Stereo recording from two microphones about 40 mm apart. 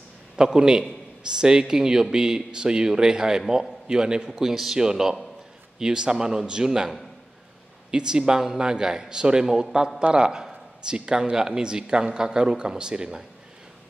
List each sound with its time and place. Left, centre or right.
0.4 s a man's voice: centre
7.9 s speech: centre